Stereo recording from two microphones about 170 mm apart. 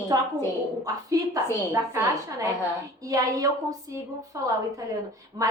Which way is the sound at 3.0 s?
20° right (ahead or behind).